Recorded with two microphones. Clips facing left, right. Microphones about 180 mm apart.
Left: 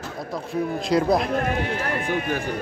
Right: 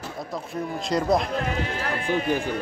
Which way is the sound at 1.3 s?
55° left (ahead or behind).